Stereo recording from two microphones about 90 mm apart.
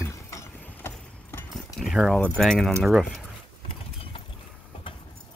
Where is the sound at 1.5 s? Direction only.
5° right (ahead or behind).